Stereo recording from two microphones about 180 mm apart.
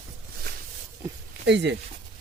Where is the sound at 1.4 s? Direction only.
75° right (ahead or behind).